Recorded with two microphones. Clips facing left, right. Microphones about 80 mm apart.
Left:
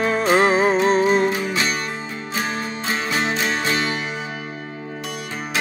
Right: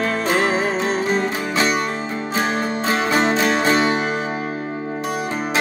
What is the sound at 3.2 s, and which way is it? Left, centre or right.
Music, right.